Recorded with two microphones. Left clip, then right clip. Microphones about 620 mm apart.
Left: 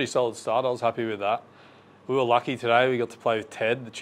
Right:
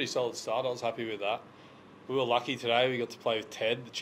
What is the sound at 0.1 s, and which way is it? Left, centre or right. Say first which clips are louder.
Speech: left 7 dB; left.